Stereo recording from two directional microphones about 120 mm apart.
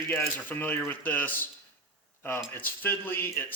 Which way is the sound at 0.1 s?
15° left (ahead or behind).